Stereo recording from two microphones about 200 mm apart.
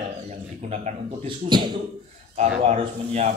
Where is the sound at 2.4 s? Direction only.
35° right (ahead or behind).